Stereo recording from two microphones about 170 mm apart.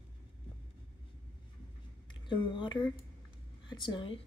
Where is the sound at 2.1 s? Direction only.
30° left (ahead or behind).